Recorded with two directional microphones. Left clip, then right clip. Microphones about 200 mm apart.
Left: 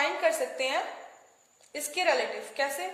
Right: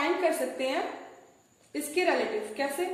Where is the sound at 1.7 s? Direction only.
55° left (ahead or behind).